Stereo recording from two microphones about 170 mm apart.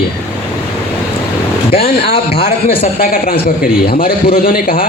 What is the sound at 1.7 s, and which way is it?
A man's voice, 35° left (ahead or behind).